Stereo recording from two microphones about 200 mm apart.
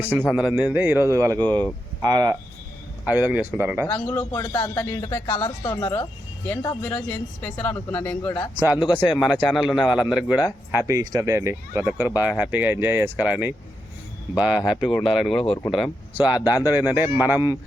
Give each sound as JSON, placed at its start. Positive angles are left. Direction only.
{"t": 0.2, "sound": "speech", "side_deg": -5}
{"t": 1.4, "sound": "speech", "side_deg": 5}
{"t": 2.0, "sound": "speech", "side_deg": -20}
{"t": 4.1, "sound": "speech", "side_deg": 10}
{"t": 8.5, "sound": "speech", "side_deg": -10}
{"t": 9.7, "sound": "a man's voice", "side_deg": 20}
{"t": 10.2, "sound": "speech", "side_deg": -5}
{"t": 15.4, "sound": "a man's voice", "side_deg": 20}
{"t": 15.7, "sound": "speech", "side_deg": -5}